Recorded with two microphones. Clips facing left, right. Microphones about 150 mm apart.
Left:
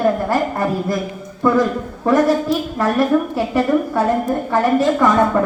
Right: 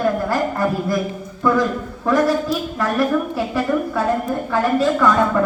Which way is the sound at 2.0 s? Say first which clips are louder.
Left 3 dB; 25° left (ahead or behind).